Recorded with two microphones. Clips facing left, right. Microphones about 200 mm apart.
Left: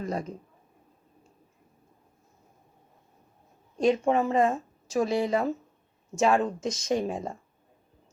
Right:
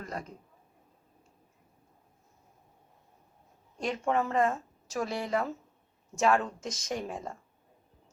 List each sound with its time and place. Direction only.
0.0 s speech: 20° left (ahead or behind)
3.8 s speech: 20° left (ahead or behind)